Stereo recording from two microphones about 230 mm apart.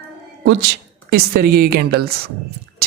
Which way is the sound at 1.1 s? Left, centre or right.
Right.